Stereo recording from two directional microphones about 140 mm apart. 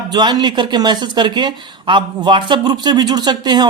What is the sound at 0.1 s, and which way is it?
Speech, 30° right (ahead or behind).